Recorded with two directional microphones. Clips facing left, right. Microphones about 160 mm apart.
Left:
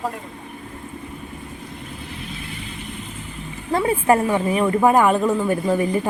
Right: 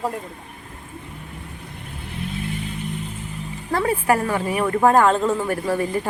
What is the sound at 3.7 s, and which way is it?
A woman's voice, 20° left (ahead or behind).